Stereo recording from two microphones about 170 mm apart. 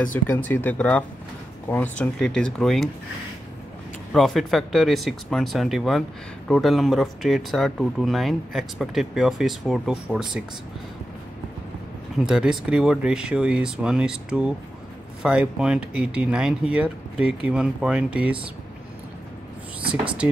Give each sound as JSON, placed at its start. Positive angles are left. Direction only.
{"t": 0.1, "sound": "speech", "side_deg": 10}
{"t": 4.1, "sound": "speech", "side_deg": 0}
{"t": 12.3, "sound": "speech", "side_deg": -5}